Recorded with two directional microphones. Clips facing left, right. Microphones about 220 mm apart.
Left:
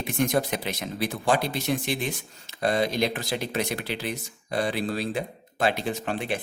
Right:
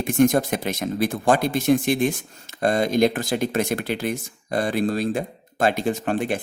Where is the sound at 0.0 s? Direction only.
50° right (ahead or behind).